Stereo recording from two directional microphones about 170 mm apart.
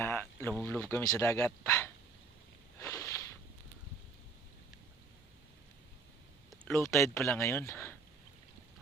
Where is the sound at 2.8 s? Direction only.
20° left (ahead or behind).